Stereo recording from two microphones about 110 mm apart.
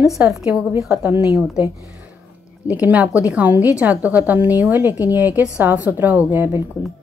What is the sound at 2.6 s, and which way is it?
A woman's voice, 15° right (ahead or behind).